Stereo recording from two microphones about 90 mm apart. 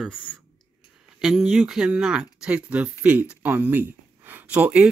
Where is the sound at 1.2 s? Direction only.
5° right (ahead or behind).